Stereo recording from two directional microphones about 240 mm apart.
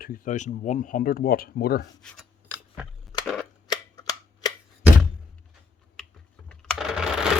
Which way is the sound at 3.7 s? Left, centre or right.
Centre.